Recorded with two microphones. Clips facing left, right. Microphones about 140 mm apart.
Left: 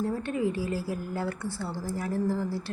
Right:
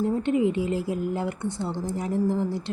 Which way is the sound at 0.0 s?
20° right (ahead or behind).